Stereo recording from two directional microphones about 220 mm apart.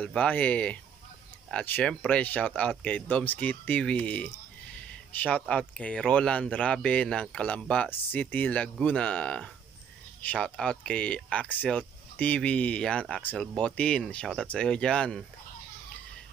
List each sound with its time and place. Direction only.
0.0 s speech: 5° left (ahead or behind)